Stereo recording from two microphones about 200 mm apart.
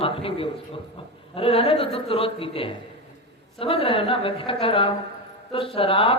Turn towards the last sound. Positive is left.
turn(degrees=25)  # may be behind; listen again after turning